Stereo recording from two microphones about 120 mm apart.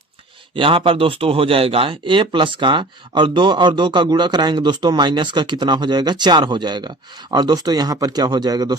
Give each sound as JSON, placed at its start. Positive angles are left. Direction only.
{"t": 0.5, "sound": "speech", "side_deg": -45}